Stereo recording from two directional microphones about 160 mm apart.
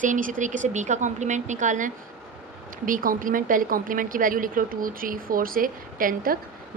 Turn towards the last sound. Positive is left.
turn(degrees=-60)  # may be behind; listen again after turning